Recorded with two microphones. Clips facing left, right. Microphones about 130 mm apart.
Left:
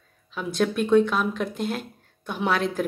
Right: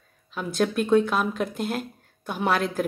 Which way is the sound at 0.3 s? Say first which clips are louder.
Even; centre (ahead or behind).